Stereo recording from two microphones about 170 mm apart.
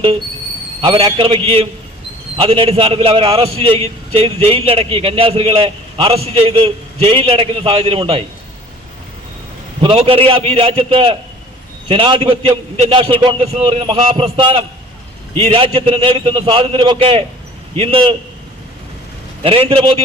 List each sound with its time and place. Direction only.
0.8 s a man's voice: 30° right (ahead or behind)
9.8 s a man's voice: 35° right (ahead or behind)
19.4 s a man's voice: 35° right (ahead or behind)